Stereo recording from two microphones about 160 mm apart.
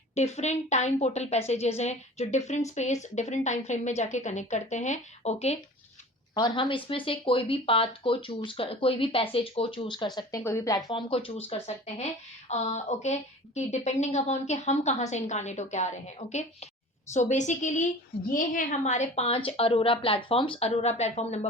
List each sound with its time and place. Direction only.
0.1 s a woman's voice: 45° left (ahead or behind)
6.3 s speech: 30° left (ahead or behind)
10.2 s a woman's voice: 20° left (ahead or behind); by 21.4 s 45° left (ahead or behind)